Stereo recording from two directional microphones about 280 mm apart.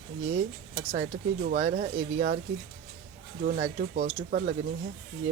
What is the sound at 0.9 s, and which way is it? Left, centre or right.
Speech, right.